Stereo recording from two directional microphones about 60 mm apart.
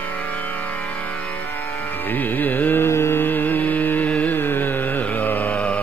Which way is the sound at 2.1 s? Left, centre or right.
Left.